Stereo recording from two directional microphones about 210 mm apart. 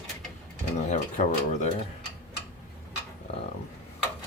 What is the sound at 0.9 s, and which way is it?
Speech, 35° left (ahead or behind).